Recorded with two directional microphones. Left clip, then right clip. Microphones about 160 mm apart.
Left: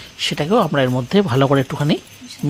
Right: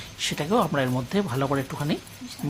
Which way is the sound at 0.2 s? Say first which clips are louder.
Left 7 dB; 40° left (ahead or behind).